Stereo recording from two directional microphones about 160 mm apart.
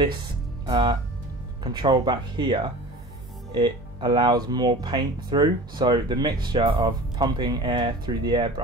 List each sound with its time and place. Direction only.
0.7 s speech: 30° right (ahead or behind)